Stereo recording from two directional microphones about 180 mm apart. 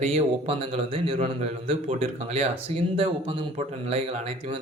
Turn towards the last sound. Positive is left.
turn(degrees=-35)  # may be behind; listen again after turning